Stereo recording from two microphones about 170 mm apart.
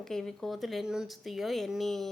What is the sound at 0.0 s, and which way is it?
A woman's voice, 5° left (ahead or behind).